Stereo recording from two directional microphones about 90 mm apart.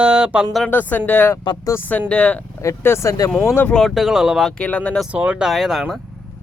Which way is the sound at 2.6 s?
30° left (ahead or behind).